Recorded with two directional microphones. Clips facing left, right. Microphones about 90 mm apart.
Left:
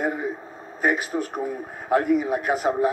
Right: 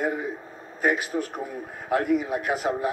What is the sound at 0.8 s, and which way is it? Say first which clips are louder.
A woman's voice: left 1 dB; 35° left (ahead or behind).